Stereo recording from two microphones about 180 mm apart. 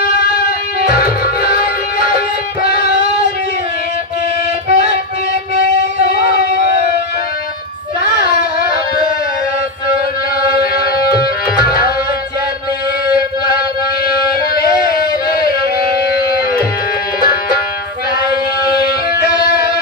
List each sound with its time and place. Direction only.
0.7 s music: 55° left (ahead or behind)
4.6 s music: 35° right (ahead or behind)
6.0 s a sound: 60° left (ahead or behind)
8.3 s music: 55° left (ahead or behind)
10.5 s music: 60° left (ahead or behind)
14.0 s music: 55° left (ahead or behind)
18.9 s music: 55° left (ahead or behind)